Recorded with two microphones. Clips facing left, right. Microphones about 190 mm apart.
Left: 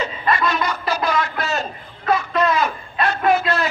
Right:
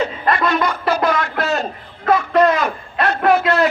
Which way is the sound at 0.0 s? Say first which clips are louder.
Right 3 dB; 60° right (ahead or behind).